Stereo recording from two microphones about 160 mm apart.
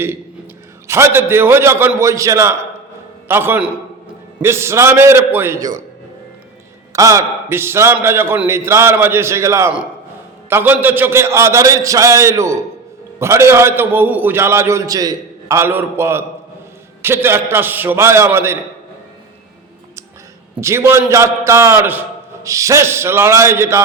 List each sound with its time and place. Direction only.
0.9 s a man's voice: 15° right (ahead or behind)
6.9 s a man's voice: 20° right (ahead or behind)
20.6 s a man's voice: 15° right (ahead or behind)